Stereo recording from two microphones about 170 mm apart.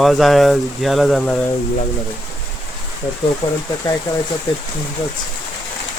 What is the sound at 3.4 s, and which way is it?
Speech, 30° left (ahead or behind).